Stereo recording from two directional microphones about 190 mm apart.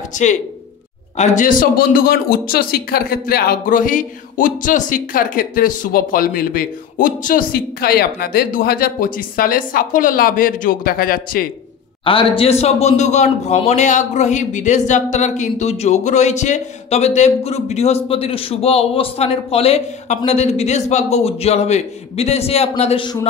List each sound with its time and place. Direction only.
0.1 s a man's voice: 40° left (ahead or behind)
12.0 s a man's voice: 25° left (ahead or behind)